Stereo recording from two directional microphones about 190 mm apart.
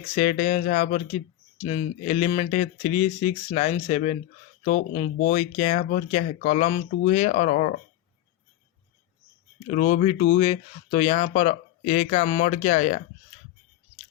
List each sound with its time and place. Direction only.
0.2 s speech: 45° left (ahead or behind)
1.6 s speech: 35° left (ahead or behind)
5.5 s speech: 40° left (ahead or behind)
9.6 s speech: 45° left (ahead or behind)